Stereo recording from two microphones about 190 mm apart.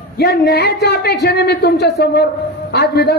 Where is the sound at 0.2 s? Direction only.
60° left (ahead or behind).